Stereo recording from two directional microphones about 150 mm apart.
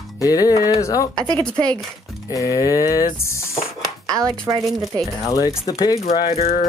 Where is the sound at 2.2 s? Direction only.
20° left (ahead or behind).